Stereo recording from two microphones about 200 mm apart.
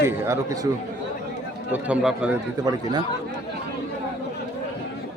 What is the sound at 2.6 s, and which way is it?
Speech, 20° right (ahead or behind).